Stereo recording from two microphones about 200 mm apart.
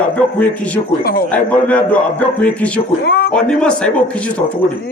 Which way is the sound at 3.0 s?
50° left (ahead or behind).